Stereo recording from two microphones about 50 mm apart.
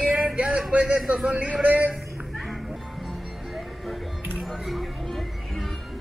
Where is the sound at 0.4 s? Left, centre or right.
Right.